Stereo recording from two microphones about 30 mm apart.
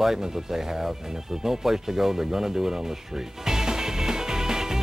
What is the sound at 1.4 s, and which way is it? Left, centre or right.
Music, centre.